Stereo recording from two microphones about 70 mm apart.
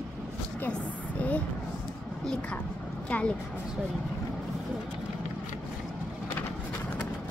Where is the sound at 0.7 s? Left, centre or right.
Left.